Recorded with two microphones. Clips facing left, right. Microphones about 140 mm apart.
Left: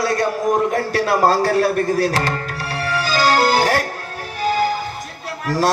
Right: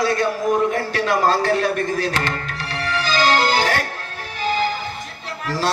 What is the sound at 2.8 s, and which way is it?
Music, 40° left (ahead or behind).